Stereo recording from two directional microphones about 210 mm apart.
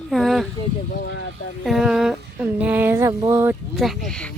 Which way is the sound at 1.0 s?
55° left (ahead or behind).